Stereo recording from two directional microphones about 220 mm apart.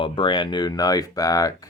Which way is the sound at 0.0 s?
20° left (ahead or behind).